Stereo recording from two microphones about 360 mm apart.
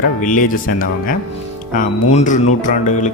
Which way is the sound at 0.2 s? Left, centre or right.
Left.